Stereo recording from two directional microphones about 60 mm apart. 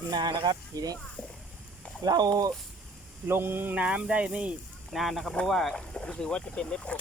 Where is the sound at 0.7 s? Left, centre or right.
Right.